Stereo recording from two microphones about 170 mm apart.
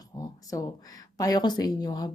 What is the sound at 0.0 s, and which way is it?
Speech, 20° left (ahead or behind).